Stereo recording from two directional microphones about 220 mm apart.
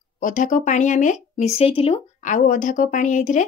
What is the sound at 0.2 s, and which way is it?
Speech, 35° left (ahead or behind).